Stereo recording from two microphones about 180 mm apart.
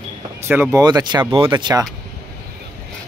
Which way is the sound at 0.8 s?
25° right (ahead or behind).